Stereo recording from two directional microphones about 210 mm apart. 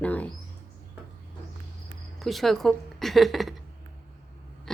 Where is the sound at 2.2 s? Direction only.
Centre (ahead or behind).